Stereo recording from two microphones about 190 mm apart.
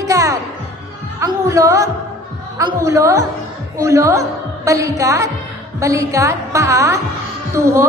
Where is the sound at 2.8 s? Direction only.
15° right (ahead or behind).